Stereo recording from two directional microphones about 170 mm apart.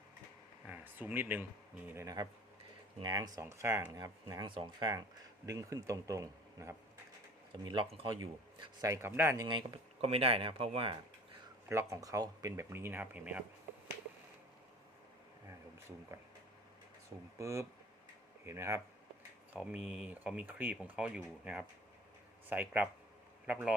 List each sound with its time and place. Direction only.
0.7 s speech: 10° right (ahead or behind)
7.7 s speech: 30° right (ahead or behind); by 9.5 s 15° right (ahead or behind)
9.5 s speech: 30° right (ahead or behind)
11.7 s speech: 15° right (ahead or behind)
17.3 s speech: 15° right (ahead or behind)
22.4 s speech: 10° right (ahead or behind)